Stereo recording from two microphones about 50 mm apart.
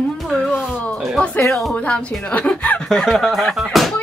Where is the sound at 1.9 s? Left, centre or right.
Left.